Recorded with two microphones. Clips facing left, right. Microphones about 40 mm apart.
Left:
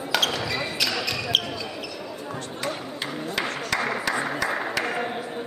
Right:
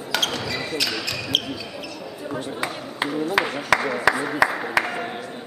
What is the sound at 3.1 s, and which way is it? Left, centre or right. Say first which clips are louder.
Speech: right 6 dB; centre.